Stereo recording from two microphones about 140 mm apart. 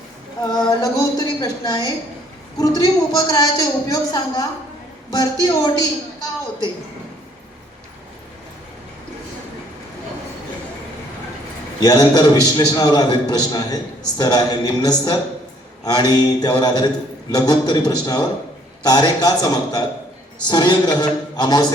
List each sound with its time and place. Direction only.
0.4 s a man's voice: 30° left (ahead or behind)
11.8 s a man's voice: 30° left (ahead or behind)
20.5 s a sound: 30° left (ahead or behind)